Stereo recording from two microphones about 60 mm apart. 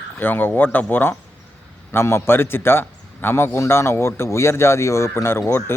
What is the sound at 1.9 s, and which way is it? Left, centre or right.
A man's voice, left.